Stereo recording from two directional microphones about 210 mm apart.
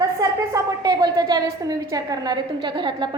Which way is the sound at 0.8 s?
20° right (ahead or behind).